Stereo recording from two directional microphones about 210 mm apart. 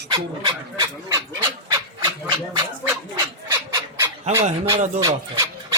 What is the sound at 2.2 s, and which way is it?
Speech, 20° right (ahead or behind).